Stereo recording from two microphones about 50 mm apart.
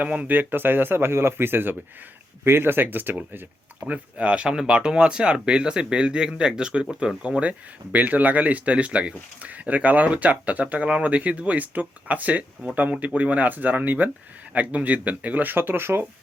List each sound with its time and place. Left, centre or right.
0.0 s speech: right
3.8 s speech: right